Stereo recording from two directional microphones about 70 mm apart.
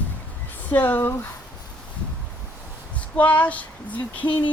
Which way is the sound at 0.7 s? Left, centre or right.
Left.